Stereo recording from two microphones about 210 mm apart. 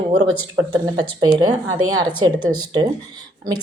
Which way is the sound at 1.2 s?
20° right (ahead or behind).